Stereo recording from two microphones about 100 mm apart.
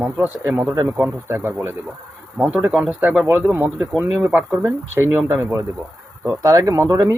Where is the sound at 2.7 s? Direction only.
Centre (ahead or behind).